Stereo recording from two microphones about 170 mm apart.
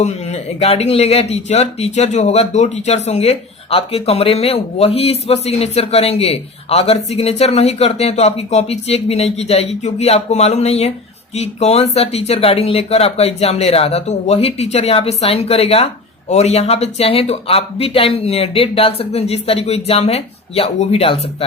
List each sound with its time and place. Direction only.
0.0 s speech: 40° left (ahead or behind)